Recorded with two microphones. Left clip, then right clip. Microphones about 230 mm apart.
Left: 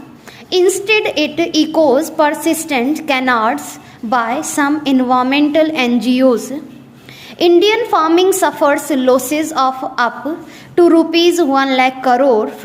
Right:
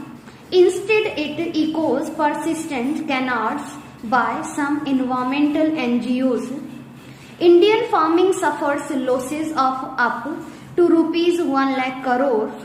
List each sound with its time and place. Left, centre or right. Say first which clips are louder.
0.5 s a woman's voice: left 3 dB; left